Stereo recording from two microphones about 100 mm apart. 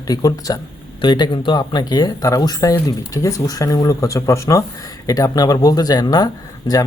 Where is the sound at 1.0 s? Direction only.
50° left (ahead or behind).